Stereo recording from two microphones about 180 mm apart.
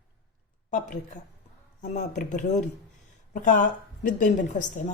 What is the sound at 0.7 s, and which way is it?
Speech, 45° left (ahead or behind).